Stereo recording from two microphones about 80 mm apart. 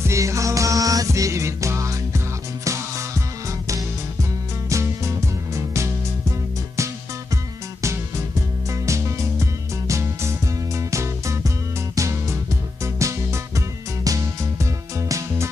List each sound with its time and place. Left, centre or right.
0.0 s music: right